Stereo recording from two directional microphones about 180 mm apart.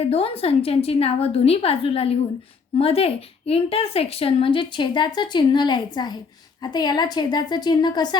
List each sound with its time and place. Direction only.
0.0 s a woman's voice: 35° left (ahead or behind)